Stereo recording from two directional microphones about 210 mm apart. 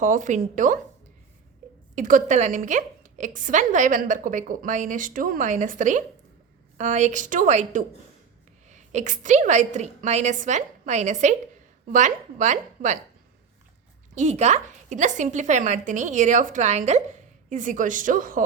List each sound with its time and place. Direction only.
0.0 s a woman's voice: 35° right (ahead or behind)
2.0 s a woman's voice: 40° right (ahead or behind)
14.2 s a woman's voice: 35° right (ahead or behind)